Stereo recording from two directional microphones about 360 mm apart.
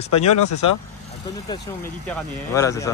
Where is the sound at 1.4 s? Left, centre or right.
Centre.